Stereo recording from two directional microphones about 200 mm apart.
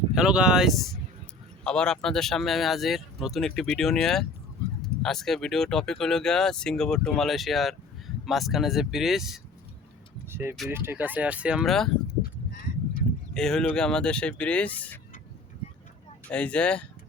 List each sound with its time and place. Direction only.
0.1 s speech: 5° right (ahead or behind)
10.2 s vehicle: 10° right (ahead or behind)
10.7 s speech: 10° right (ahead or behind)
12.2 s a sound: 50° left (ahead or behind)
13.3 s speech: 5° left (ahead or behind)
16.2 s speech: 5° left (ahead or behind)